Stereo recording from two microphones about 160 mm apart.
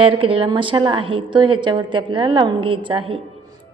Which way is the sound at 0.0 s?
35° right (ahead or behind).